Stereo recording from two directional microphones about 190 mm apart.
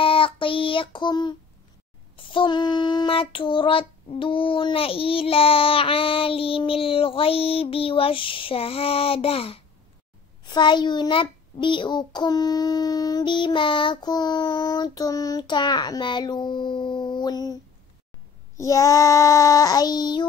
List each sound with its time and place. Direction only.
0.0 s child singing: 30° left (ahead or behind)
18.6 s child singing: 15° left (ahead or behind)